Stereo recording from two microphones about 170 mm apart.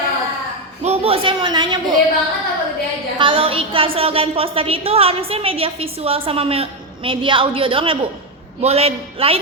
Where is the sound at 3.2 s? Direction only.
30° right (ahead or behind).